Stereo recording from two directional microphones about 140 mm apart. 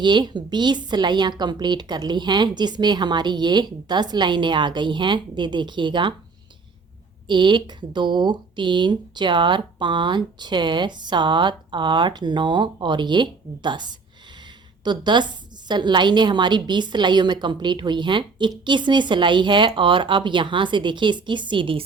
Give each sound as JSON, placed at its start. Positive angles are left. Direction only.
{"t": 0.0, "sound": "a woman's voice", "side_deg": -30}
{"t": 7.3, "sound": "a woman's voice", "side_deg": -35}